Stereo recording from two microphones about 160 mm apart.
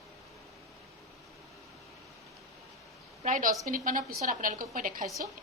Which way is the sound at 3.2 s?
50° right (ahead or behind).